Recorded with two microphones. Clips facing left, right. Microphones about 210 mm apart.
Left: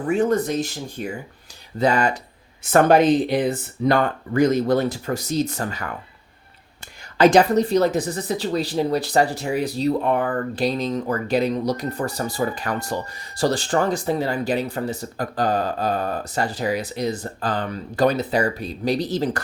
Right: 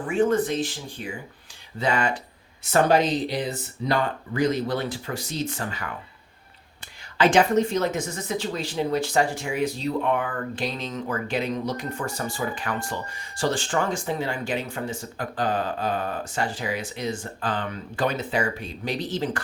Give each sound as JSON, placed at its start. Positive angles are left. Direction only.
{"t": 0.1, "sound": "speech", "side_deg": 40}
{"t": 2.6, "sound": "speech", "side_deg": 55}
{"t": 7.2, "sound": "speech", "side_deg": 40}